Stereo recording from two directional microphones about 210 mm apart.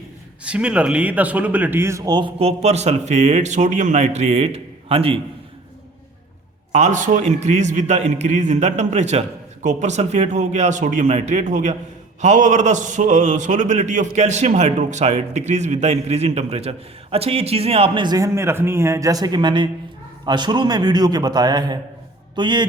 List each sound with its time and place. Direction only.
0.4 s speech: 5° right (ahead or behind); by 5.2 s 25° right (ahead or behind)
6.7 s a man's voice: 35° right (ahead or behind)